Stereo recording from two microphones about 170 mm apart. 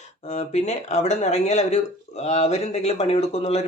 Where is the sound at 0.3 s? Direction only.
40° left (ahead or behind).